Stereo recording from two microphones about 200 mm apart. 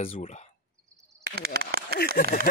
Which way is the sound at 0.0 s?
30° left (ahead or behind).